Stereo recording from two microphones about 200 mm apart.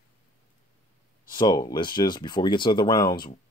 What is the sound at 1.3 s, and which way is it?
Speech, 20° left (ahead or behind).